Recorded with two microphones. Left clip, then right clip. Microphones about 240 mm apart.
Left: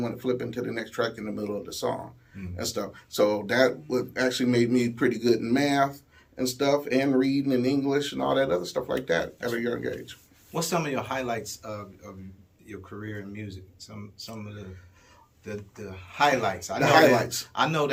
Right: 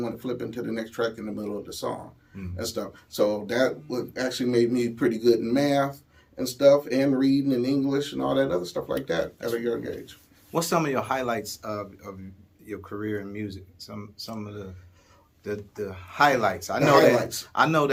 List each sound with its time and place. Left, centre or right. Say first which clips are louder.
0.0 s speech: left 2 dB; centre
10.5 s speech: right 3 dB; centre